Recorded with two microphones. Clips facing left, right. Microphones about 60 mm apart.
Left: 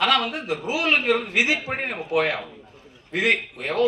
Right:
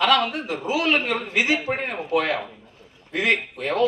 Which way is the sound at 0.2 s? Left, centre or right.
Right.